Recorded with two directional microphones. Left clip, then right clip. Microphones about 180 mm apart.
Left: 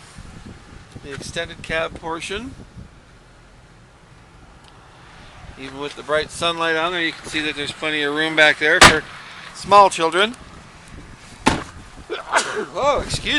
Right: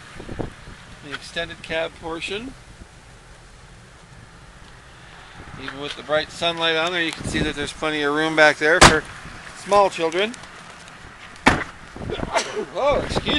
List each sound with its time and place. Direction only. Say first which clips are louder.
1.2 s speech: left 2 dB; 15° left (ahead or behind)
5.5 s speech: left 1 dB; 15° left (ahead or behind)
9.6 s speech: left 5 dB; 15° left (ahead or behind)
12.1 s speech: left 3 dB; 15° left (ahead or behind)